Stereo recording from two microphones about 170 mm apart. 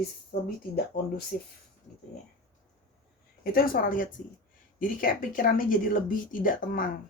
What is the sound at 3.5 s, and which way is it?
Speech, 60° left (ahead or behind).